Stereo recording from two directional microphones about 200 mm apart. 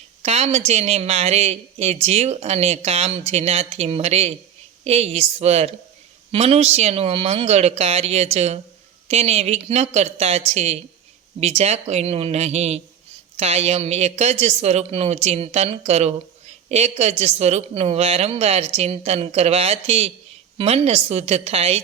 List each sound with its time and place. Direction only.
0.2 s a woman's voice: 30° right (ahead or behind)